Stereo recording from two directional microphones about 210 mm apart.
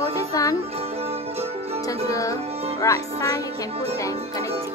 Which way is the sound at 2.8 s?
15° left (ahead or behind).